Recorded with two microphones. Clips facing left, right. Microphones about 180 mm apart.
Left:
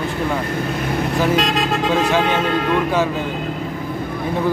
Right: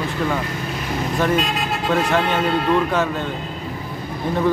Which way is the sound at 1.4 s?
90° left.